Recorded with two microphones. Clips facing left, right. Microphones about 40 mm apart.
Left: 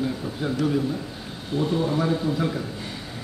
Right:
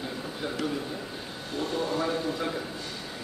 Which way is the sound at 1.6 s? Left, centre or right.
Centre.